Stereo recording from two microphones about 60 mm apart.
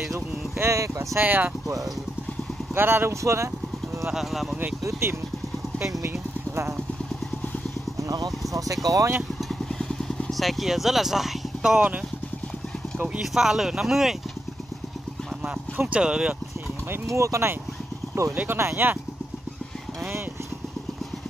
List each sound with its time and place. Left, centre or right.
0.6 s speech: right
1.2 s speech: right
2.7 s speech: right
4.1 s speech: centre
5.0 s speech: right
8.8 s speech: right
10.3 s speech: centre
13.2 s speech: centre
15.9 s speech: centre
17.0 s speech: right
18.3 s speech: right